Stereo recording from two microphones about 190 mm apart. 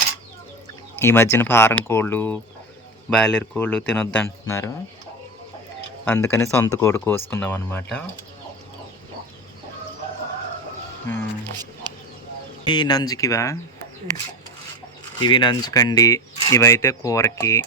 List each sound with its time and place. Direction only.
0.9 s speech: 10° left (ahead or behind)
6.1 s speech: 10° left (ahead or behind)
11.0 s speech: 10° left (ahead or behind)
11.6 s music: 20° right (ahead or behind)
12.6 s speech: 25° left (ahead or behind)
15.2 s speech: 25° left (ahead or behind)